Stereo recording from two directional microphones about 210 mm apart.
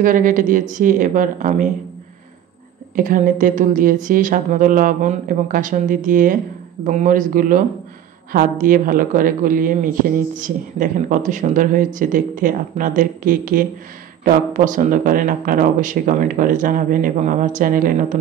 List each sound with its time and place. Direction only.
0.0 s speech: 40° right (ahead or behind)
3.0 s speech: 40° right (ahead or behind)